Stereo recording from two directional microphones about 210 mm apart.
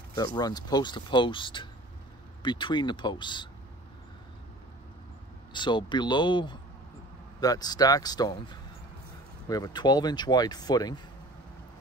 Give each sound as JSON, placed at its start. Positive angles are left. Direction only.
{"t": 0.1, "sound": "speech", "side_deg": 20}
{"t": 5.5, "sound": "speech", "side_deg": 20}